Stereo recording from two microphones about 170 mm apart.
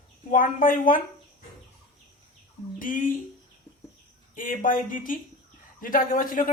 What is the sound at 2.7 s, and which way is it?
Speech, 50° left (ahead or behind).